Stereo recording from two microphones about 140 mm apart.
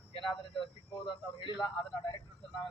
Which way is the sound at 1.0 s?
35° left (ahead or behind).